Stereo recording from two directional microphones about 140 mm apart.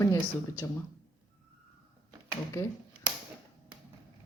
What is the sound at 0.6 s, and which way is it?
Speech, 20° left (ahead or behind).